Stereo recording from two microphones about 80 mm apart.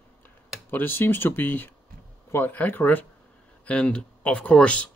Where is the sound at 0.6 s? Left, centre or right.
Left.